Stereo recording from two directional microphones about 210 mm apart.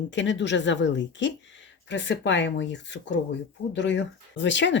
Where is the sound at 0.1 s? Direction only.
60° left (ahead or behind).